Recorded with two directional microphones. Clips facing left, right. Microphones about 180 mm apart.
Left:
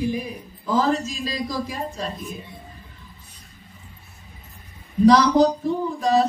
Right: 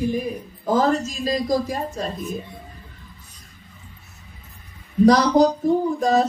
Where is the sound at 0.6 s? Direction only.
45° right (ahead or behind).